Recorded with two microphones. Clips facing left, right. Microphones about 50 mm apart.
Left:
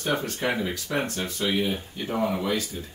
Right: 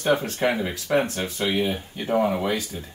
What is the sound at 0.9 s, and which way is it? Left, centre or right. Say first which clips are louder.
Speech: right 7 dB; centre.